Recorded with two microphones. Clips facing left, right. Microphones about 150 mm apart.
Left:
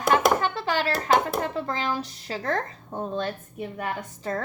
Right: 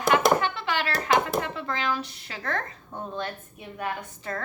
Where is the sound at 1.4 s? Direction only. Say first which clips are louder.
Left 2 dB; 40° left (ahead or behind).